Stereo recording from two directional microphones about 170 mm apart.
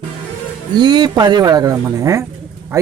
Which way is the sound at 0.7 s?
25° right (ahead or behind).